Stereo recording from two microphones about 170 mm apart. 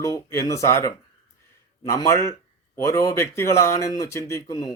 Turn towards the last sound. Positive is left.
turn(degrees=20)  # may be behind; listen again after turning